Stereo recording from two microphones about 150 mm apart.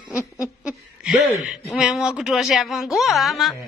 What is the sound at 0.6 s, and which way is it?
Speech, centre (ahead or behind).